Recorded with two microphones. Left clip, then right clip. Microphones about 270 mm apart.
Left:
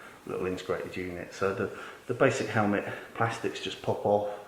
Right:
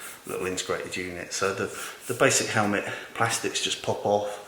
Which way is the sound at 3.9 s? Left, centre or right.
Left.